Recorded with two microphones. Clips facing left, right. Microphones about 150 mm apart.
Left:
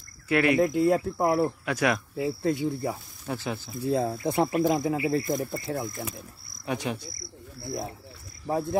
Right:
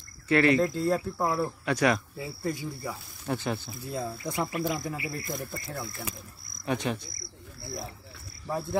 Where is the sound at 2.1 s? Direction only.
75° left (ahead or behind).